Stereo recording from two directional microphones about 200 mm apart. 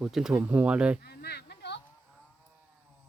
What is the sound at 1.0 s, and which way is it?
Chop, 55° left (ahead or behind).